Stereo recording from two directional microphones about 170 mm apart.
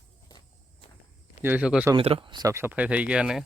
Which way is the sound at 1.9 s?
35° right (ahead or behind).